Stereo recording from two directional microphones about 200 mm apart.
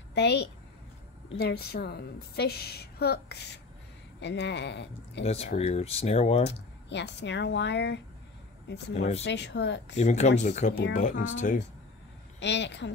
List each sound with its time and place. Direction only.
0.1 s a woman's voice: 60° left (ahead or behind)
5.2 s speech: 30° left (ahead or behind)
6.4 s speech: 60° left (ahead or behind)
8.9 s speech: 35° left (ahead or behind)
9.2 s speech: 60° left (ahead or behind)
9.9 s speech: 35° left (ahead or behind)
12.4 s speech: 60° left (ahead or behind)